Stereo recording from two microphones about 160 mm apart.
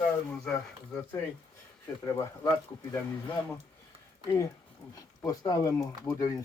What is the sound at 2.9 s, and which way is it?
Speech, 15° left (ahead or behind).